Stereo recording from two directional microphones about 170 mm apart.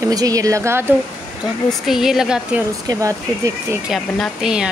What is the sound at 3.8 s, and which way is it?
Speech, centre (ahead or behind).